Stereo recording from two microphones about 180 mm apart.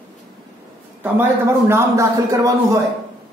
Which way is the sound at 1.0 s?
15° right (ahead or behind).